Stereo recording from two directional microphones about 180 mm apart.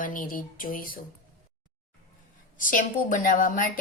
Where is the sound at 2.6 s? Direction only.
50° left (ahead or behind).